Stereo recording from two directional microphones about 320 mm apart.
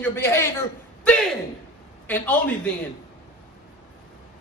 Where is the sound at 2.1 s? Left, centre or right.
Centre.